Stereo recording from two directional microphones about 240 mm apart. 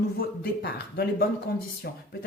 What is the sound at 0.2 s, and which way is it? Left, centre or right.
Speech, left.